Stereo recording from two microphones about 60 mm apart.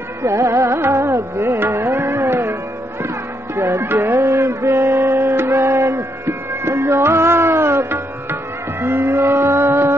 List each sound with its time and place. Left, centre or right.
0.2 s music: right
3.5 s speech: right
4.1 s music: right
8.8 s vehicle: right